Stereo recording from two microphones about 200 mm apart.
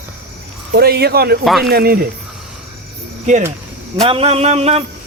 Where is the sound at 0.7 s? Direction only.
50° right (ahead or behind).